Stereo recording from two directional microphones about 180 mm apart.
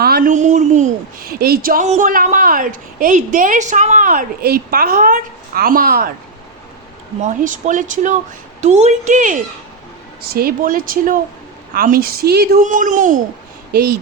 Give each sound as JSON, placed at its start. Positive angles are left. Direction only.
{"t": 0.0, "sound": "speech", "side_deg": -55}
{"t": 7.2, "sound": "a woman's voice", "side_deg": -45}